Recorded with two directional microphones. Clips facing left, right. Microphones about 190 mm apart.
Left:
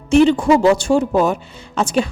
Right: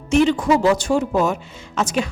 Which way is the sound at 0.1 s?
30° left (ahead or behind).